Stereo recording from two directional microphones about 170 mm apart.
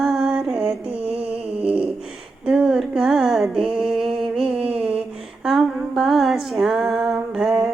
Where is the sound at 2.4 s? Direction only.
5° right (ahead or behind).